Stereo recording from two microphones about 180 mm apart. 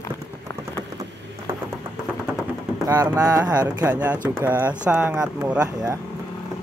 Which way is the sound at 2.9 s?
15° right (ahead or behind).